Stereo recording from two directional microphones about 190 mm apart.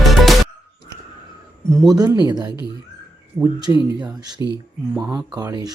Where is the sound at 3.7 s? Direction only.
20° right (ahead or behind).